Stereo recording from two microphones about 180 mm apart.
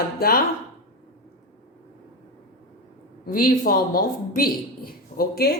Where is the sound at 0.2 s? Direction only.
55° left (ahead or behind).